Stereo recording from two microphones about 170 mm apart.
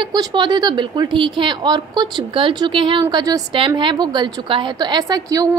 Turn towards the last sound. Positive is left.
turn(degrees=-20)  # may be behind; listen again after turning